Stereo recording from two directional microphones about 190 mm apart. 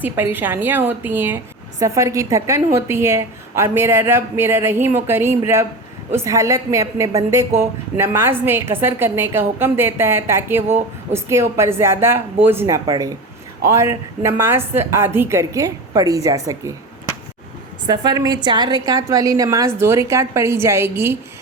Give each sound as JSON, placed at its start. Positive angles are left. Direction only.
{"t": 0.0, "sound": "a woman's voice", "side_deg": -10}